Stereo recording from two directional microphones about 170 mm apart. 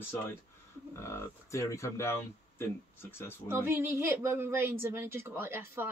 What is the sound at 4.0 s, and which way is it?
Speech, 15° right (ahead or behind).